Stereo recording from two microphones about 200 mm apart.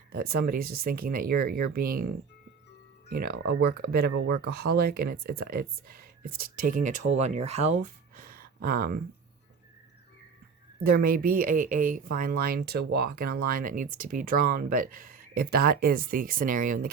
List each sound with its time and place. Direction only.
0.1 s speech: 50° right (ahead or behind)
3.1 s speech: 50° right (ahead or behind)
10.8 s speech: 50° right (ahead or behind)